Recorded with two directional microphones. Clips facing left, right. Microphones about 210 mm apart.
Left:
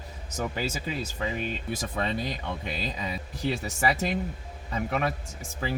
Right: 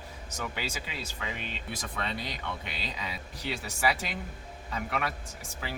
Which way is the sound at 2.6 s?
45° left (ahead or behind).